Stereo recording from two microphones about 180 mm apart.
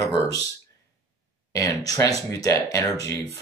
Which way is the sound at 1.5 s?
20° left (ahead or behind).